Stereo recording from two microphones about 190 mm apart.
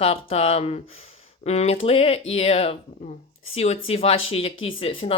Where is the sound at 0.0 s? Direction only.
30° left (ahead or behind).